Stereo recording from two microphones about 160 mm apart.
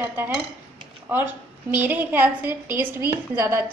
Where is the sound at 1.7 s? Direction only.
10° right (ahead or behind).